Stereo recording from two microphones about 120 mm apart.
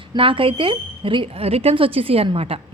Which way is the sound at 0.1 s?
45° right (ahead or behind).